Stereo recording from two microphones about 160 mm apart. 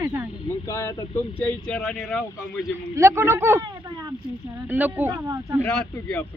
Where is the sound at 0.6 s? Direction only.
20° left (ahead or behind).